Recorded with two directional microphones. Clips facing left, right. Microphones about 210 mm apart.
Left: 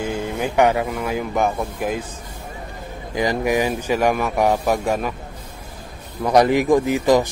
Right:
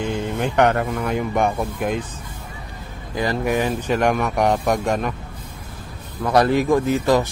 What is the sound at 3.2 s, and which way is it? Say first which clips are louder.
Speech: left 1 dB; 15° left (ahead or behind).